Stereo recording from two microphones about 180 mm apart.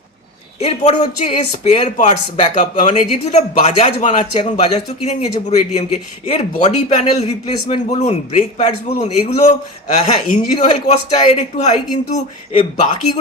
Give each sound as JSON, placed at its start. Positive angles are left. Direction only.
{"t": 0.6, "sound": "speech", "side_deg": 40}